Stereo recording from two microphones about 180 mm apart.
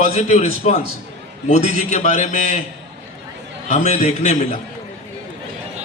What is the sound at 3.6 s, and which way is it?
Speech, 40° left (ahead or behind).